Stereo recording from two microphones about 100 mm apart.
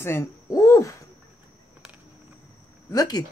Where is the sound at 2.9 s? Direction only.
40° left (ahead or behind).